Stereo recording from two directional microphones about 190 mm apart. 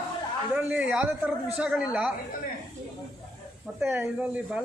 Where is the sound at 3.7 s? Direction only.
10° right (ahead or behind).